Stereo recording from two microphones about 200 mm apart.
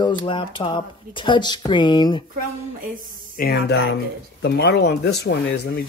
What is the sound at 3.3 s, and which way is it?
Speech, 50° left (ahead or behind).